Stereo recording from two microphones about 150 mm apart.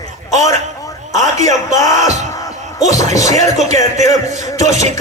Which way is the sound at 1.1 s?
55° right (ahead or behind).